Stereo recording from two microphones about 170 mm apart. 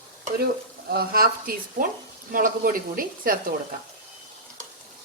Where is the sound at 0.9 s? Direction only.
65° right (ahead or behind).